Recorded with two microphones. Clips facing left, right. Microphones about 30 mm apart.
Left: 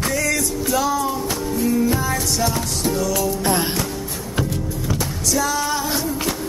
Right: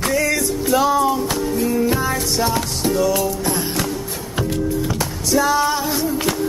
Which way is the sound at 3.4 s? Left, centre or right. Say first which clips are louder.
Left 2 dB; left.